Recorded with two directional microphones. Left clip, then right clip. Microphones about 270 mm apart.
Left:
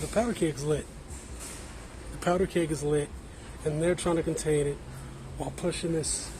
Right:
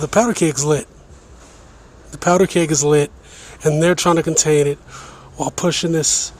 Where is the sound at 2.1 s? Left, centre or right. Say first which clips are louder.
Right 12 dB; right.